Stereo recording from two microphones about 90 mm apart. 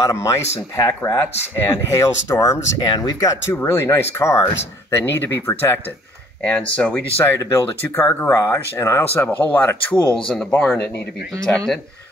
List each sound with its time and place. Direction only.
0.0 s speech: 35° left (ahead or behind)
3.4 s speech: 30° left (ahead or behind)
6.7 s speech: 15° left (ahead or behind)
7.3 s speech: 30° left (ahead or behind)
10.1 s speech: 10° left (ahead or behind)